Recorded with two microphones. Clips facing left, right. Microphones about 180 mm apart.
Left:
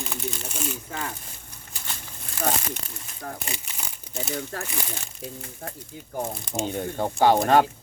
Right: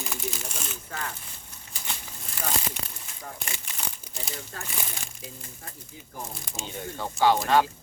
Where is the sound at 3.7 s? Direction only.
5° left (ahead or behind).